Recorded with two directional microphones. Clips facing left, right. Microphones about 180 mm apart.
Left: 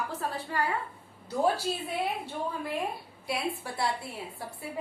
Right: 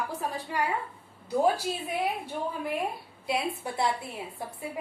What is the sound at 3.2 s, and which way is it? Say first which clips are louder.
A woman's voice: right 2 dB; 20° right (ahead or behind).